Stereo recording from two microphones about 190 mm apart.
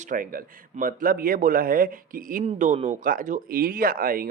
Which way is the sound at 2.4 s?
35° right (ahead or behind).